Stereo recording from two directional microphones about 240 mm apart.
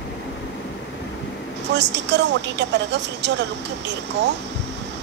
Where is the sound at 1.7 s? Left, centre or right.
Right.